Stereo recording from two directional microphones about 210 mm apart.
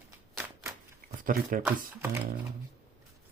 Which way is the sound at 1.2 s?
40° right (ahead or behind).